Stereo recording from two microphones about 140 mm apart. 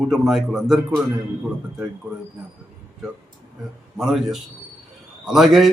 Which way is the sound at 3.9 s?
Centre (ahead or behind).